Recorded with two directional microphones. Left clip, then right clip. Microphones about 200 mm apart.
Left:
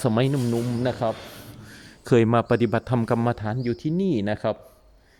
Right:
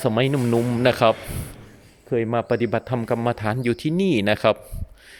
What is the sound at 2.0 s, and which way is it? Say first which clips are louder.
Speech: left 2 dB; 25° left (ahead or behind).